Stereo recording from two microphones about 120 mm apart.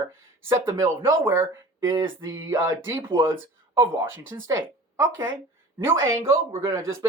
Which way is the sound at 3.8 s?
25° right (ahead or behind).